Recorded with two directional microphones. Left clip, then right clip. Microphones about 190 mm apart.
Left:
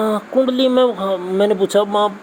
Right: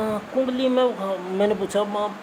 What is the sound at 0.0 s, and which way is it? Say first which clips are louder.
Speech: left 7 dB; 35° left (ahead or behind).